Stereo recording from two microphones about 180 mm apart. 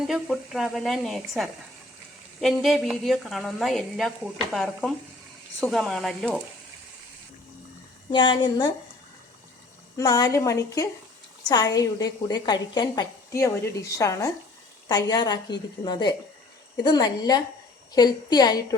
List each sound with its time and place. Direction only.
0.0 s a woman's voice: centre (ahead or behind)
8.1 s a woman's voice: 25° left (ahead or behind)
10.0 s a woman's voice: 20° left (ahead or behind)